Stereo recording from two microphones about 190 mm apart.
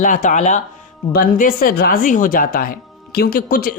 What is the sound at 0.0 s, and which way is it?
Speech, 40° left (ahead or behind).